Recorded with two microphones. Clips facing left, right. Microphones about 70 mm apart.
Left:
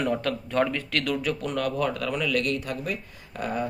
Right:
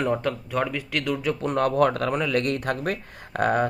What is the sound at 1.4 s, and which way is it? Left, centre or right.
Speech, right.